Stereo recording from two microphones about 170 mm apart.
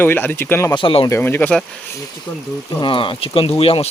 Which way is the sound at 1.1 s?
10° left (ahead or behind).